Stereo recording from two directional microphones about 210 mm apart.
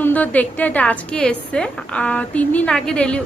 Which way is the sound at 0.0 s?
10° left (ahead or behind).